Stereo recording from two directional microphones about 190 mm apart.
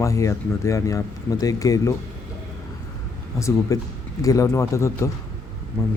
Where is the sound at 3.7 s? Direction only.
15° left (ahead or behind).